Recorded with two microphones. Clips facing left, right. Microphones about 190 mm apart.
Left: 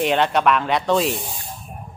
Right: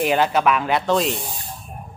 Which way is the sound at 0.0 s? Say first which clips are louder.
Even; 5° right (ahead or behind).